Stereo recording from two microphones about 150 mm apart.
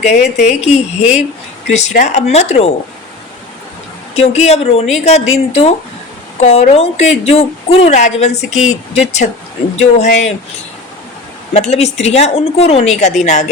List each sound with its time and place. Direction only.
0.0 s speech: 50° left (ahead or behind)
4.1 s speech: 45° left (ahead or behind)
11.5 s speech: 45° left (ahead or behind)